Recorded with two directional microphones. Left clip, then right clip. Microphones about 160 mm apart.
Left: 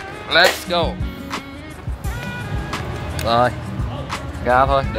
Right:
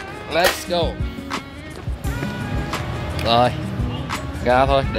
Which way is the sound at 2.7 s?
Centre (ahead or behind).